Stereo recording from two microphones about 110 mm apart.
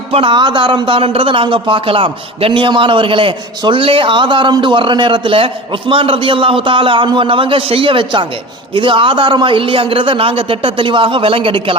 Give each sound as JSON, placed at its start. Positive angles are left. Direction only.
{"t": 0.1, "sound": "a man's voice", "side_deg": -50}